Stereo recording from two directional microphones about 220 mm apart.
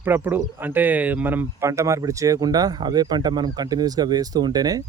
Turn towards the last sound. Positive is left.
turn(degrees=-15)  # may be behind; listen again after turning